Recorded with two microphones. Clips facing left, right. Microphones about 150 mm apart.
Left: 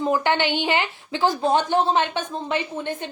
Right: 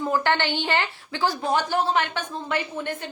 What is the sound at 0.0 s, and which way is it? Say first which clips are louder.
Speech: left 2 dB; 15° left (ahead or behind).